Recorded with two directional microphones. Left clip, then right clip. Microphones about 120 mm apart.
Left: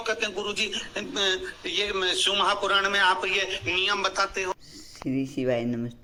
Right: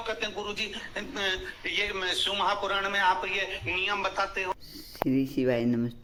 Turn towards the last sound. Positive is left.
turn(degrees=-15)  # may be behind; listen again after turning